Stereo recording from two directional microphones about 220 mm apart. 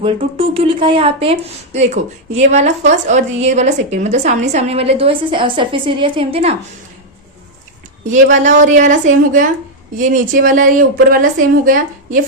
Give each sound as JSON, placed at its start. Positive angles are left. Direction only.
{"t": 0.0, "sound": "a woman's voice", "side_deg": -25}
{"t": 8.0, "sound": "a woman's voice", "side_deg": -35}